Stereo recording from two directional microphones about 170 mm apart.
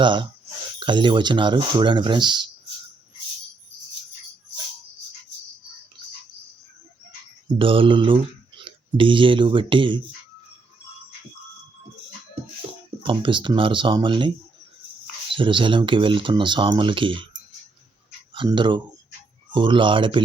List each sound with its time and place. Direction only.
0.0 s speech: 30° right (ahead or behind)
7.6 s speech: 30° right (ahead or behind)
13.0 s speech: 30° right (ahead or behind)
18.3 s speech: 30° right (ahead or behind)